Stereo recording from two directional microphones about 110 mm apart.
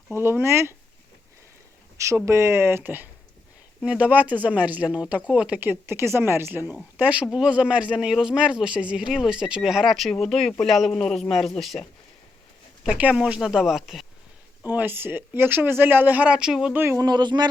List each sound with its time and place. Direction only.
0.1 s speech: 20° right (ahead or behind)
2.0 s speech: 25° right (ahead or behind); by 11.9 s centre (ahead or behind)
12.8 s speech: 10° right (ahead or behind)
14.6 s speech: 15° right (ahead or behind)
16.7 s speech: 20° right (ahead or behind)
17.0 s speech: 40° right (ahead or behind)